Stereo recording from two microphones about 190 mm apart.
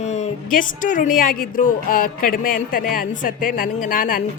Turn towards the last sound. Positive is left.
turn(degrees=45)  # may be behind; listen again after turning